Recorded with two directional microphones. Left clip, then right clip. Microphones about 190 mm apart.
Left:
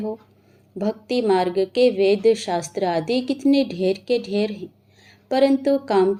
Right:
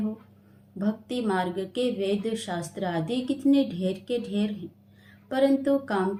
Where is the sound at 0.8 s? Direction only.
30° left (ahead or behind).